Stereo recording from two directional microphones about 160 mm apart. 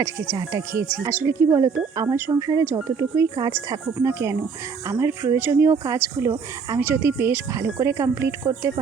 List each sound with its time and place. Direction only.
0.0 s speech: 20° right (ahead or behind)